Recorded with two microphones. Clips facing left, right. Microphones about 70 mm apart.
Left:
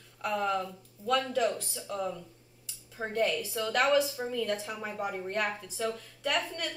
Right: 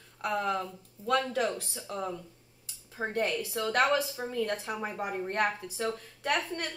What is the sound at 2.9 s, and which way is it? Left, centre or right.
A woman's voice, right.